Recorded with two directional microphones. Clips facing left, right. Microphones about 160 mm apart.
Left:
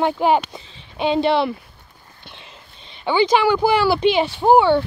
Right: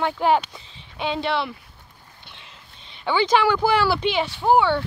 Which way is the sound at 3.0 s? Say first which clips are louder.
Left 3 dB; 10° left (ahead or behind).